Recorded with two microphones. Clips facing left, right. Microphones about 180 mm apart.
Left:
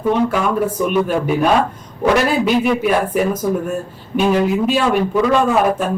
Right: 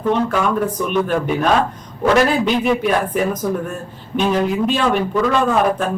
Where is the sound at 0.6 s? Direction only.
10° left (ahead or behind).